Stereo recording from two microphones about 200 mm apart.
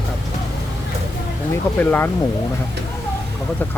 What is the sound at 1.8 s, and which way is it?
Speech, 10° left (ahead or behind).